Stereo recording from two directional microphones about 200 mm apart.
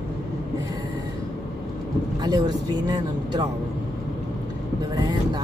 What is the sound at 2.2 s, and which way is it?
Speech, 20° right (ahead or behind).